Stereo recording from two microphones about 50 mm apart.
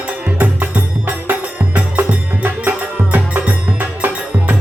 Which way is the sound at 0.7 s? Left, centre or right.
Right.